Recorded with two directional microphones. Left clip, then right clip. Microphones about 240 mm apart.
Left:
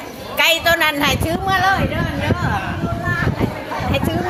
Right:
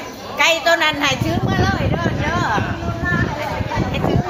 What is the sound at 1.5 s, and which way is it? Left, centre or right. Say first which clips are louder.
Speech: left 6 dB; left.